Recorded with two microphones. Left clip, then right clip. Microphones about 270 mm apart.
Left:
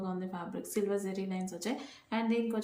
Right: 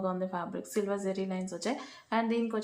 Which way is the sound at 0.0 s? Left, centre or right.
Centre.